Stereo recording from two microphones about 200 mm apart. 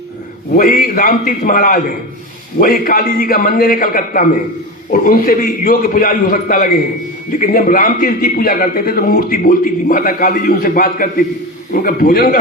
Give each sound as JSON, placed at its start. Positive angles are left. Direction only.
{"t": 0.5, "sound": "a man's voice", "side_deg": 45}